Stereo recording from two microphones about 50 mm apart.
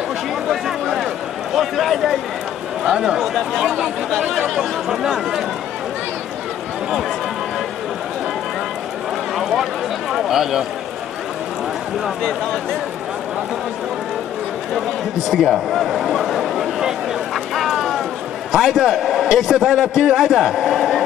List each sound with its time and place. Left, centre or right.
0.5 s a sound: centre
1.5 s a man's voice: centre
2.9 s a man's voice: centre
3.2 s a man's voice: centre
9.4 s run: centre
10.1 s a man's voice: centre
15.2 s a sound: centre
18.5 s a man's voice: centre